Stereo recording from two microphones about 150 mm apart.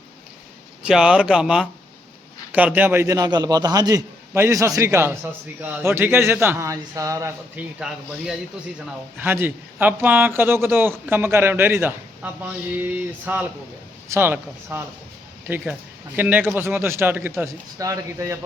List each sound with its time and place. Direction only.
0.8 s a man's voice: 5° right (ahead or behind)
7.8 s speech: 5° right (ahead or behind)
9.1 s a man's voice: 15° right (ahead or behind)